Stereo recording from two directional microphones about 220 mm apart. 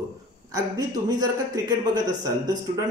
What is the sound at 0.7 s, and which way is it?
Speech, 15° right (ahead or behind).